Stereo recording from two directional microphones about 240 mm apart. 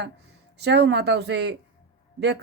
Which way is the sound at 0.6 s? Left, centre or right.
Right.